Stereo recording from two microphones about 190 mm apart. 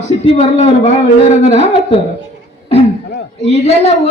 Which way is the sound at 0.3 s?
35° left (ahead or behind).